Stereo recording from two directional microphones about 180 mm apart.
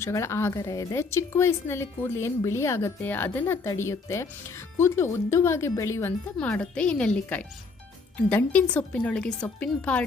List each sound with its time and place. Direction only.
0.0 s a woman's voice: 15° left (ahead or behind)